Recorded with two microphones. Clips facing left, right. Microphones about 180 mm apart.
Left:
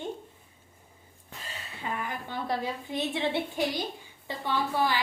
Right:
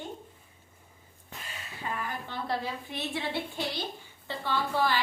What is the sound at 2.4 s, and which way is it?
A woman's voice, 15° left (ahead or behind).